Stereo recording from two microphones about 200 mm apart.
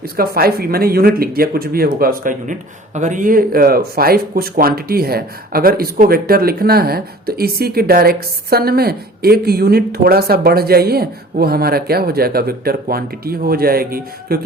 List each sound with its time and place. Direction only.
0.2 s speech: 50° right (ahead or behind)